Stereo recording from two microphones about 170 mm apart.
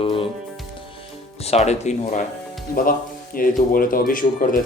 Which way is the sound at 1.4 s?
40° left (ahead or behind).